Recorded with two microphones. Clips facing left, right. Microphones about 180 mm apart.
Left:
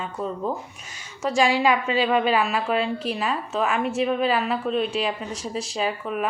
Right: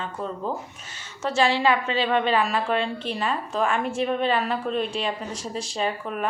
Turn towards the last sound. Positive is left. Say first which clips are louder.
# left 1 dB
turn(degrees=5)  # may be behind; listen again after turning